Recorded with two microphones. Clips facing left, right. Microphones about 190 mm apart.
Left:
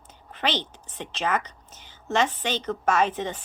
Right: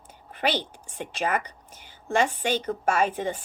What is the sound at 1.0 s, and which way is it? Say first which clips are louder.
A woman's voice: even; 10° right (ahead or behind).